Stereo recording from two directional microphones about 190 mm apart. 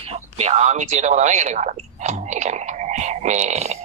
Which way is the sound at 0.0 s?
30° right (ahead or behind).